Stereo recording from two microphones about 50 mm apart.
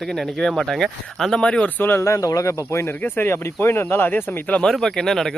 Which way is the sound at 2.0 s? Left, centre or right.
Left.